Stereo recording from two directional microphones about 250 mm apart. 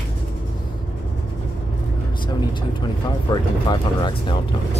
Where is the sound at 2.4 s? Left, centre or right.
Centre.